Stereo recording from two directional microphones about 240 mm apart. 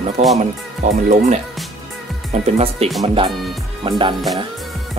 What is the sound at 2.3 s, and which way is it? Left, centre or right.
Speech, right.